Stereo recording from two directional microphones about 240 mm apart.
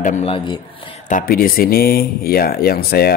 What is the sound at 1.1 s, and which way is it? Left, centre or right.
Speech, left.